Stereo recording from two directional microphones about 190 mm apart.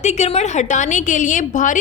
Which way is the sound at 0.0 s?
35° left (ahead or behind).